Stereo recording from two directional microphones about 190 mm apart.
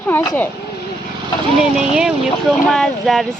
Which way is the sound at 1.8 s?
5° right (ahead or behind).